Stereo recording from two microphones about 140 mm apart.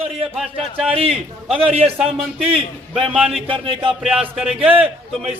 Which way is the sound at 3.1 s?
Centre (ahead or behind).